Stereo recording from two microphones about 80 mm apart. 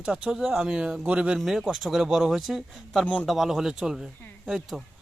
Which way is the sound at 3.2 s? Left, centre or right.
Centre.